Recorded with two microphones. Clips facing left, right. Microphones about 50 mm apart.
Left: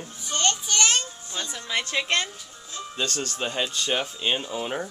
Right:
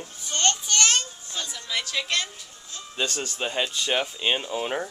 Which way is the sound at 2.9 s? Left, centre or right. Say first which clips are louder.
Right 1 dB; centre.